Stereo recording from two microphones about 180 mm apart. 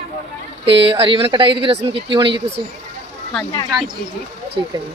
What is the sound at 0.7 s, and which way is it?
Speech, 30° right (ahead or behind).